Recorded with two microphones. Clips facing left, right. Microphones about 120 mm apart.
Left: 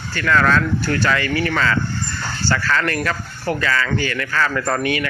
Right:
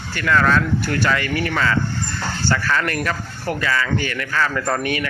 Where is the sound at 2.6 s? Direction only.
15° right (ahead or behind).